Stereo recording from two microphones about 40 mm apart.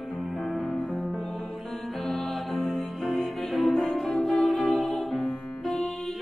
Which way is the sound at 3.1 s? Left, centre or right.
Centre.